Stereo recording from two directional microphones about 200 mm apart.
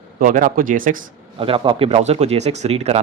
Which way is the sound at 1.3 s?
25° right (ahead or behind).